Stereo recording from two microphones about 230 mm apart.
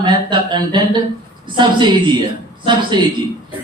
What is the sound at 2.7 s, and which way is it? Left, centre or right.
Speech, centre.